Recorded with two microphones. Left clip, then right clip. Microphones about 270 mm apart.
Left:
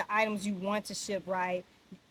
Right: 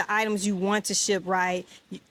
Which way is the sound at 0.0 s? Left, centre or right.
Right.